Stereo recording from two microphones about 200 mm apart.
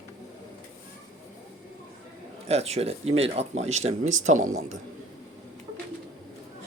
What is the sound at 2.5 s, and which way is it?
Speech, 30° right (ahead or behind).